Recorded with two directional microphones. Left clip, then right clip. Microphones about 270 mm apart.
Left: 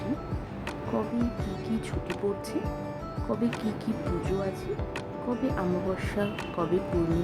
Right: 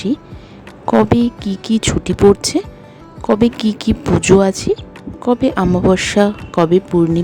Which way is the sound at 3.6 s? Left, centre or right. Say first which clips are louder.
Right 14 dB; right.